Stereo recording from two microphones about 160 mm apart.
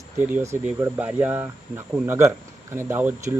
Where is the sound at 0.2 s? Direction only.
15° right (ahead or behind).